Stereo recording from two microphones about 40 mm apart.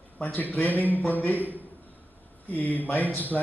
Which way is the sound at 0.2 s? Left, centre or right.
Left.